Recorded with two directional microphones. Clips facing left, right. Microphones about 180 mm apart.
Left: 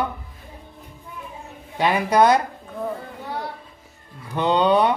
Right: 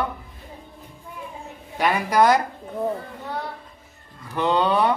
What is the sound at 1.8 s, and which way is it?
Speech, 20° left (ahead or behind).